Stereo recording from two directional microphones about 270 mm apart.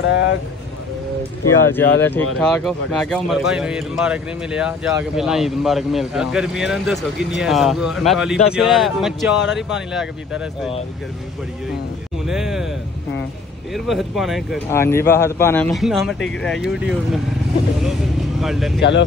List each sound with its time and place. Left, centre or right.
0.0 s speech: left
1.7 s a man's voice: centre
12.3 s a man's voice: centre
13.7 s a man's voice: centre
14.7 s a man's voice: centre
18.4 s a man's voice: centre
18.8 s speech: left